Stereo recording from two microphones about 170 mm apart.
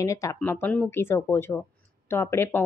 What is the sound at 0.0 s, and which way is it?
A woman's voice, 20° left (ahead or behind).